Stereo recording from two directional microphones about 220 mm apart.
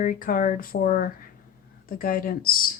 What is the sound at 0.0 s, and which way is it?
Speech, 40° left (ahead or behind).